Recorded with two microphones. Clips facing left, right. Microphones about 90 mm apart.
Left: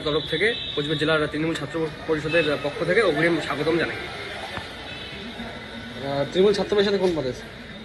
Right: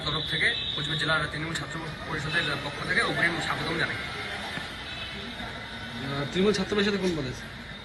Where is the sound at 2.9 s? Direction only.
20° right (ahead or behind).